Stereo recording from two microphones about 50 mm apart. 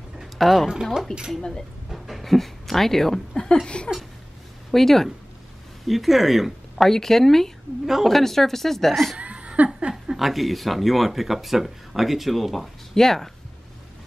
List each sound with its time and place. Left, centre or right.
0.2 s a sound: centre
1.1 s speech: centre
1.9 s a woman's voice: centre
3.6 s a sound: left
4.6 s speech: centre
6.9 s speech: centre
7.8 s a woman's voice: centre
8.1 s speech: centre
9.2 s laughter: right
9.8 s a sound: centre
10.1 s speech: centre